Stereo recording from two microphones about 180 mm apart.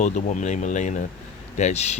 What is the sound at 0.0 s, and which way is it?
Speech, 40° left (ahead or behind).